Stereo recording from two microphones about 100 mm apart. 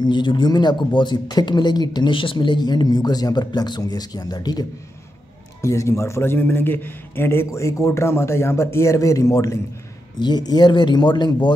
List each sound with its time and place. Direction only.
0.0 s speech: 50° left (ahead or behind)
5.6 s a man's voice: 30° left (ahead or behind)
10.1 s speech: 45° left (ahead or behind)